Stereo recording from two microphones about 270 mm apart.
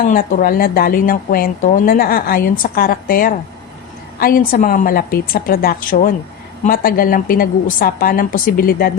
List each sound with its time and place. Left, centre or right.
0.0 s speech: left